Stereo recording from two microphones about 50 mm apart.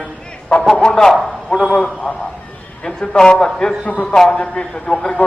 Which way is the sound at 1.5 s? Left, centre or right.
Centre.